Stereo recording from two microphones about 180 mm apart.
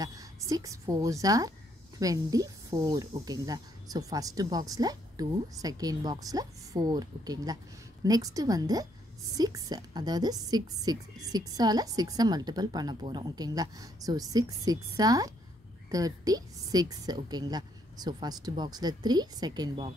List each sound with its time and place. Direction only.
0.0 s a woman's voice: 20° right (ahead or behind)